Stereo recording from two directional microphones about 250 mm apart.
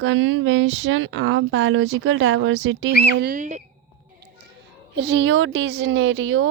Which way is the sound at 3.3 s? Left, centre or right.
Right.